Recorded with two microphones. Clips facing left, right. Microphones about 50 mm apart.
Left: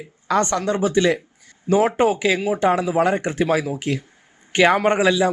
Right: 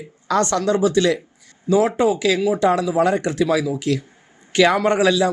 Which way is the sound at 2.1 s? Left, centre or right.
Left.